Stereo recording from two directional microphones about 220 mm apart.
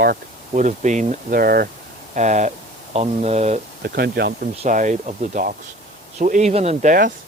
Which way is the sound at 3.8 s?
45° right (ahead or behind).